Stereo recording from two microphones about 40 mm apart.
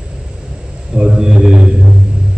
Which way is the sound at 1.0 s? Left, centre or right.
Centre.